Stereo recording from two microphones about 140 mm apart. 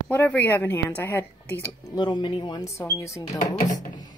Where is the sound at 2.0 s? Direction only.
35° left (ahead or behind).